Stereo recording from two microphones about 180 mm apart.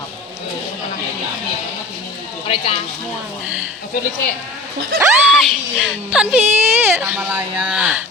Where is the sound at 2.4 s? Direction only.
30° left (ahead or behind).